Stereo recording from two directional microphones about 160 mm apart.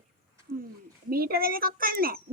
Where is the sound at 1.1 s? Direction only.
70° right (ahead or behind).